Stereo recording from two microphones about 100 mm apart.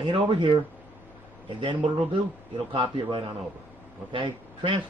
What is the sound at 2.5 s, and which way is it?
Speech, 60° right (ahead or behind).